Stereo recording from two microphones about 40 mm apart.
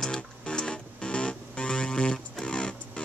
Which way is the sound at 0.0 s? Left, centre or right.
Centre.